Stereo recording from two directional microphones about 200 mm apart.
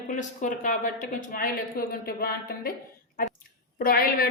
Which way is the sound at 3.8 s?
45° left (ahead or behind).